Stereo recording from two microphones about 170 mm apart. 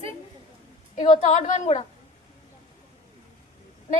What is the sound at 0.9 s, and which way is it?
Speech, 45° left (ahead or behind).